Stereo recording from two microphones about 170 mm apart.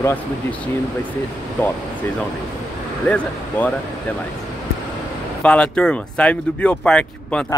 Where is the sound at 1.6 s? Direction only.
10° left (ahead or behind).